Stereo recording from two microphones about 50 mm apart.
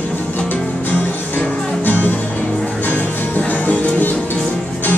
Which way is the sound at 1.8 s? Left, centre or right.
Left.